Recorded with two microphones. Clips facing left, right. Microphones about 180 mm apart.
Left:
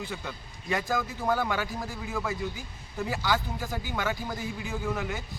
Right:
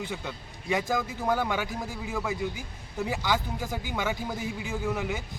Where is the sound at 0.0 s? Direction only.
15° right (ahead or behind).